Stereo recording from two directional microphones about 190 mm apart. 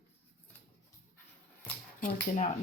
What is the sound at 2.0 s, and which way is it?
Speech, 40° left (ahead or behind).